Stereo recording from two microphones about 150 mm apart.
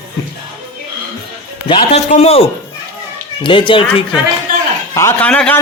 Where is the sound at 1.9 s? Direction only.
45° left (ahead or behind).